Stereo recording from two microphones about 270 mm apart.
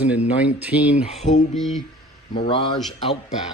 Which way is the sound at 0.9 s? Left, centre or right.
Left.